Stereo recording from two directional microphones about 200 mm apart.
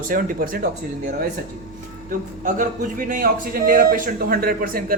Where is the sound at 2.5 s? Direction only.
45° right (ahead or behind).